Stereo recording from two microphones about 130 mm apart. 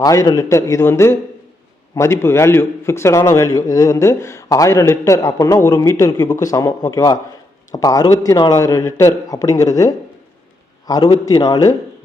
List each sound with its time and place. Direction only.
0.0 s a man's voice: 25° left (ahead or behind)